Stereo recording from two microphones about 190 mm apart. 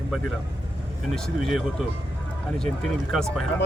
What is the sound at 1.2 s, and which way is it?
Speech, centre (ahead or behind).